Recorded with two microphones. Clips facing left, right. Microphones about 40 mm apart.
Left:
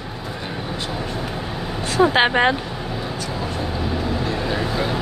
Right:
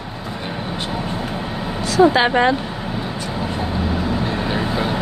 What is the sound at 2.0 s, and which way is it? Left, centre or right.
Speech, left.